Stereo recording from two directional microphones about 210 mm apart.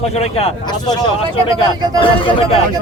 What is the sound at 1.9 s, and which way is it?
Speech, 25° left (ahead or behind).